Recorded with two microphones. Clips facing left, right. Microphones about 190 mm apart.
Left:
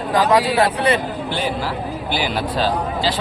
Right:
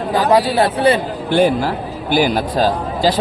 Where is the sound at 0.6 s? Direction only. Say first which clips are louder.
Right 3 dB; 35° right (ahead or behind).